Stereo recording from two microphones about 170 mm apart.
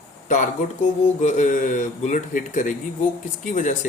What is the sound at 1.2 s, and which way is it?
Speech, 50° left (ahead or behind).